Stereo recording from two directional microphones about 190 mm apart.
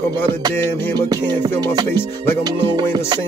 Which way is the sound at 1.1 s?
20° right (ahead or behind).